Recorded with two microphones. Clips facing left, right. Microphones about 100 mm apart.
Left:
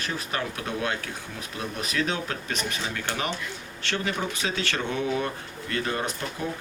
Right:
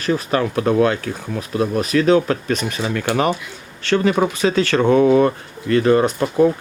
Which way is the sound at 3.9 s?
90° right.